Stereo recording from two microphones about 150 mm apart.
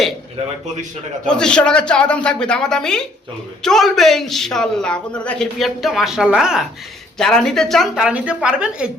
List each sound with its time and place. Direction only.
1.3 s speech: 5° left (ahead or behind)